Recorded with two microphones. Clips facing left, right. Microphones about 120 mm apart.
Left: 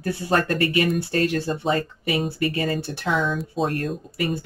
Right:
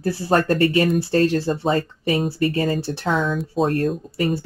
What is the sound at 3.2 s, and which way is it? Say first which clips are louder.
Speech: right 2 dB; centre (ahead or behind).